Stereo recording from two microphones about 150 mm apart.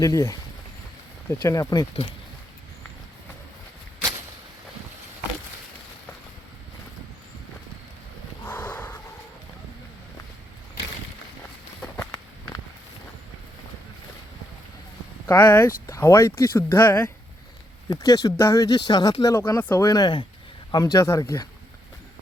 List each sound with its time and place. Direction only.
0.0 s speech: 20° left (ahead or behind)
8.4 s a sound: 10° left (ahead or behind)
11.9 s walk: 20° left (ahead or behind)
15.3 s speech: 10° left (ahead or behind)
17.8 s speech: 25° left (ahead or behind)